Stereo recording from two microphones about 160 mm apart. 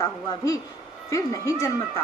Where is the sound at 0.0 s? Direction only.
20° left (ahead or behind).